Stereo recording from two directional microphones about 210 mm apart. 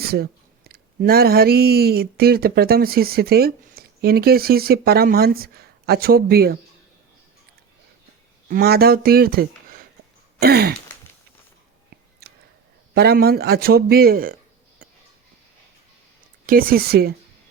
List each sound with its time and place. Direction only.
0.0 s speech: 45° right (ahead or behind)
8.4 s a man's voice: 45° right (ahead or behind)
12.9 s a man's voice: 50° right (ahead or behind)
14.8 s a sound: 40° right (ahead or behind)
16.5 s a man's voice: 45° right (ahead or behind)